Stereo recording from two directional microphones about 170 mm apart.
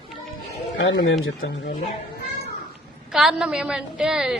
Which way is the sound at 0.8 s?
90° left.